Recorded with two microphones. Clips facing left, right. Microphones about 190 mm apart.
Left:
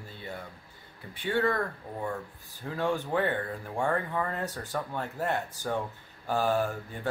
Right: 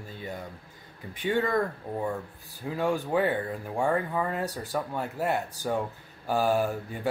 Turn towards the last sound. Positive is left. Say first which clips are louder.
# right 3 dB
turn(degrees=-10)  # may be behind; listen again after turning